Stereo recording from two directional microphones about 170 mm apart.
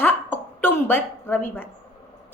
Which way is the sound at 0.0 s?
10° left (ahead or behind).